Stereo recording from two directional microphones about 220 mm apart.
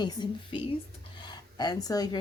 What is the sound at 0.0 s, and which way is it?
Speech, 20° left (ahead or behind).